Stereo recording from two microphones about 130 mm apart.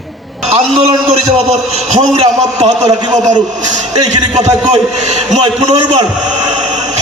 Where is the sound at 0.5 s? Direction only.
50° right (ahead or behind).